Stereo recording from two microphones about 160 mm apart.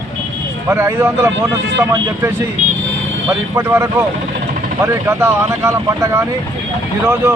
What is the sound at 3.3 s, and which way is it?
Speech, 15° right (ahead or behind).